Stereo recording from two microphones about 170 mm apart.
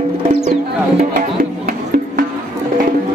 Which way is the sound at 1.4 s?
60° right (ahead or behind).